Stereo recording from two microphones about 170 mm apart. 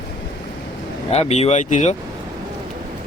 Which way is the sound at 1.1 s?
40° left (ahead or behind).